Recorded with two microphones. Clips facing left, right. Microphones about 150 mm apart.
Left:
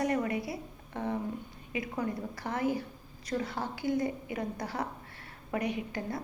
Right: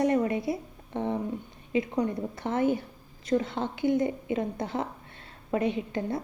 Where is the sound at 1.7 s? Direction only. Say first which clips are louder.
Right 7 dB; 25° right (ahead or behind).